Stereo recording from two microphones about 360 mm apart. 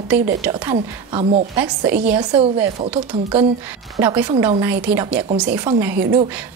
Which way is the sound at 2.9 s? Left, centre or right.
Centre.